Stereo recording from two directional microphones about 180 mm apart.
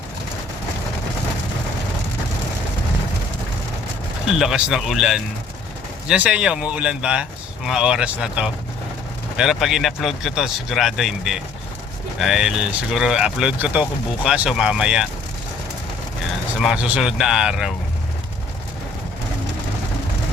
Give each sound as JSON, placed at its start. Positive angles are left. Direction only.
{"t": 4.4, "sound": "speech", "side_deg": 0}
{"t": 16.6, "sound": "speech", "side_deg": -5}